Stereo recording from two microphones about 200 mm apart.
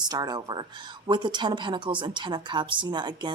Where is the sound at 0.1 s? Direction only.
20° right (ahead or behind).